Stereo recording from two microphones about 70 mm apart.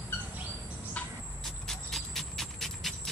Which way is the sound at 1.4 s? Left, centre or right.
Centre.